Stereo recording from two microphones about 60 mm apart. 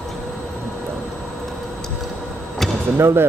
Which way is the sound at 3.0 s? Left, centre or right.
Right.